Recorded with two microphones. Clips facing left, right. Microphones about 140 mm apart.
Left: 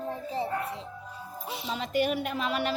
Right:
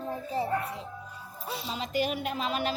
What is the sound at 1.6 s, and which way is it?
A child's voice, 55° left (ahead or behind).